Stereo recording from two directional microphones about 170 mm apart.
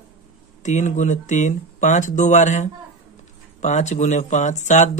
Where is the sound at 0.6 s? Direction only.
45° left (ahead or behind).